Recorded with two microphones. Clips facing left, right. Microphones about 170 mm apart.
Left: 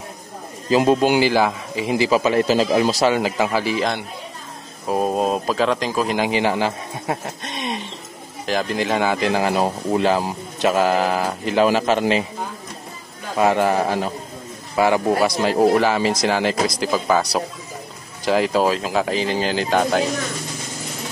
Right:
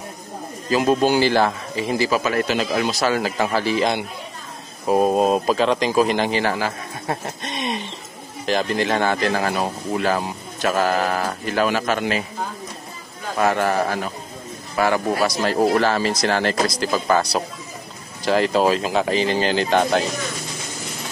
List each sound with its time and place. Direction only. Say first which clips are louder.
0.7 s speech: left 3 dB; 25° left (ahead or behind)
0.9 s speech: left 1 dB; 15° left (ahead or behind); by 3.0 s 30° left (ahead or behind)
3.0 s speech: left 2 dB; 20° left (ahead or behind)
4.8 s a man's voice: right 3 dB; 5° right (ahead or behind); by 6.7 s 20° left (ahead or behind)
7.1 s a sound: even; 5° left (ahead or behind)
8.5 s speech: right 1 dB; 5° left (ahead or behind); by 12.3 s 25° left (ahead or behind)
13.4 s a man's voice: left 2 dB; 15° left (ahead or behind)